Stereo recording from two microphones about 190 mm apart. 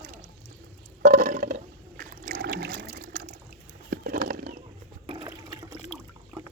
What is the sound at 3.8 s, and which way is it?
Horse, 55° right (ahead or behind).